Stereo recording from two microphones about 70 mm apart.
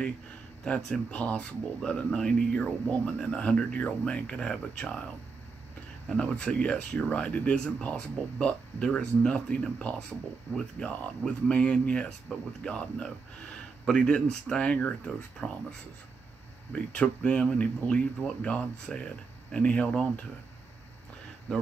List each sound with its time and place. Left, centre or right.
0.7 s speech: centre
1.1 s speech: centre
6.1 s speech: centre
16.7 s speech: centre